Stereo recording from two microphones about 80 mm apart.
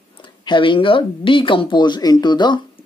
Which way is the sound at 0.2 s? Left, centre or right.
Left.